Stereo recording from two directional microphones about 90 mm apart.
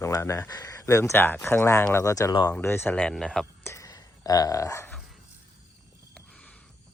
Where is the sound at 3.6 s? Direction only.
35° left (ahead or behind).